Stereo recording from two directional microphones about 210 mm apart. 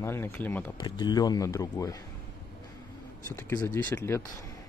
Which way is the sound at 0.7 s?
20° left (ahead or behind).